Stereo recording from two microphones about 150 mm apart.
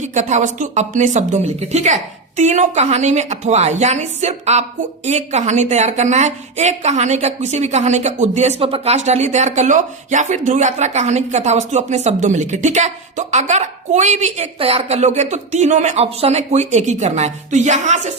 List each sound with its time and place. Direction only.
0.0 s a woman's voice: 50° right (ahead or behind)